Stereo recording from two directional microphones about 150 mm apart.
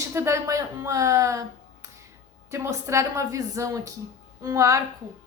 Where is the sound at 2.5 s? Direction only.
20° right (ahead or behind).